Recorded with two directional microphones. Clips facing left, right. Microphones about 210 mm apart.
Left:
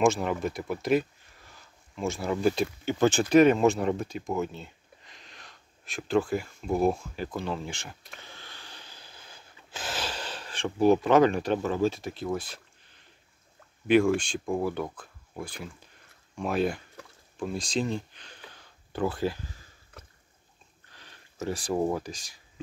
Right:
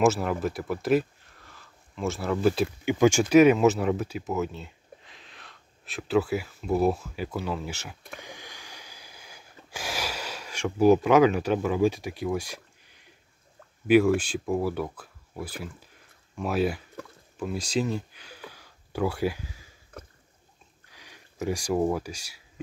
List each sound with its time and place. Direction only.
0.0 s speech: 5° right (ahead or behind)
1.5 s a sound: centre (ahead or behind)
2.4 s speech: centre (ahead or behind)
2.8 s speech: 10° right (ahead or behind)
8.2 s snort: 15° right (ahead or behind)
13.8 s speech: 5° right (ahead or behind)
17.4 s a sound: 5° right (ahead or behind)
20.9 s a sound: 10° right (ahead or behind)
21.7 s speech: 5° right (ahead or behind)